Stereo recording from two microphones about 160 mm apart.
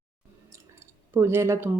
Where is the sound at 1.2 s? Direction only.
15° right (ahead or behind).